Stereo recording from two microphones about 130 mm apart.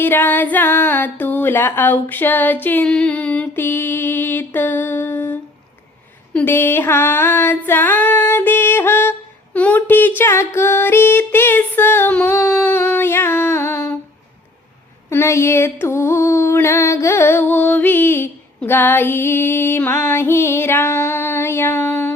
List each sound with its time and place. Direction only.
0.0 s music: 15° left (ahead or behind)
6.3 s female singing: 15° left (ahead or behind)
15.1 s music: 20° left (ahead or behind)